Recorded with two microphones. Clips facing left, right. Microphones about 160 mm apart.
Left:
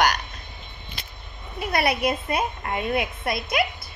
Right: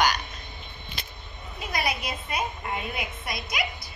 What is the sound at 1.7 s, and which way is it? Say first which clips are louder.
A woman's voice: left 7 dB; 65° left (ahead or behind).